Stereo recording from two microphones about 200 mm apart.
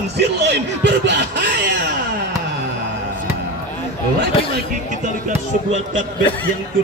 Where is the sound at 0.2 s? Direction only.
60° right (ahead or behind).